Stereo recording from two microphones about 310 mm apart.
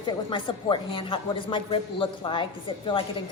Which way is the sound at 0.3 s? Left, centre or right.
Centre.